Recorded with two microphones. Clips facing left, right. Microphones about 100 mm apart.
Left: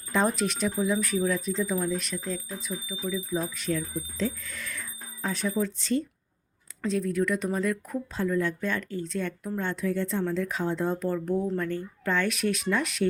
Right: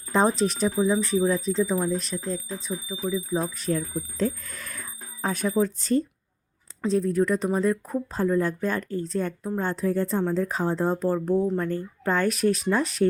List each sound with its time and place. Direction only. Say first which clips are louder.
0.1 s speech: right 4 dB; 35° right (ahead or behind)
11.7 s speech: right 3 dB; 40° right (ahead or behind)